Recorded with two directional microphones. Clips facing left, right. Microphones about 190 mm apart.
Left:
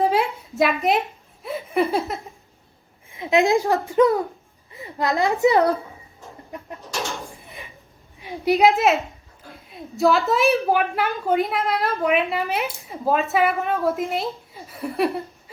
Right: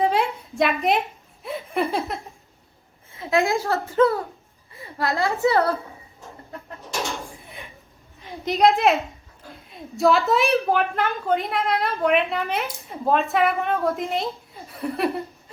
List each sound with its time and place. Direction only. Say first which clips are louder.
0.0 s a sound: left 1 dB; centre (ahead or behind)
1.4 s laughter: left 3 dB; centre (ahead or behind)
3.1 s a child's voice: left 3 dB; 15° left (ahead or behind)
8.2 s a woman's voice: left 2 dB; 10° left (ahead or behind)